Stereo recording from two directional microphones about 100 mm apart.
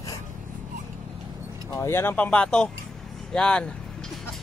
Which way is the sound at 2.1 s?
15° left (ahead or behind).